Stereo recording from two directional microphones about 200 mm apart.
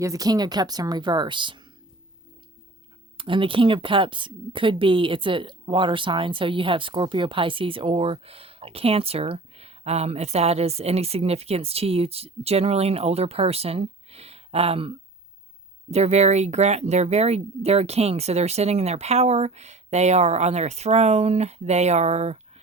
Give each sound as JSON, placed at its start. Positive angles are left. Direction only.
{"t": 0.0, "sound": "speech", "side_deg": -15}
{"t": 3.2, "sound": "speech", "side_deg": -25}